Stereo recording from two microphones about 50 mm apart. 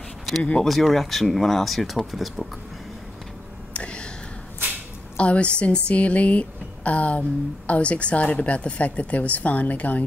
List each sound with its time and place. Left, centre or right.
0.7 s speech: centre
3.7 s a sound: left
5.1 s a woman's voice: left